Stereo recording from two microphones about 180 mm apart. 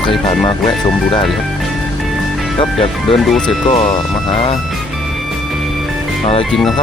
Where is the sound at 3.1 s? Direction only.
5° left (ahead or behind).